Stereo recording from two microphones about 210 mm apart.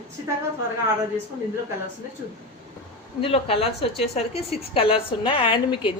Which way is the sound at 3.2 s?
25° left (ahead or behind).